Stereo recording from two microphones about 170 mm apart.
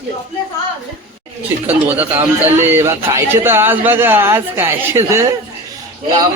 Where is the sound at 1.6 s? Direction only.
10° right (ahead or behind).